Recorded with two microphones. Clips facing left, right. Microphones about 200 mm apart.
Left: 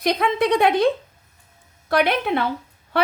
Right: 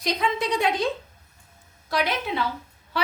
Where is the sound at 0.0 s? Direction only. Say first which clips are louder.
Left 6 dB; 60° left (ahead or behind).